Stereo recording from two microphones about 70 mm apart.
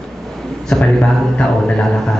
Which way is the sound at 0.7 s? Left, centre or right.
Centre.